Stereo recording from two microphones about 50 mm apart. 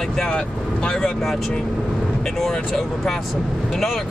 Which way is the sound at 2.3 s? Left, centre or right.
Centre.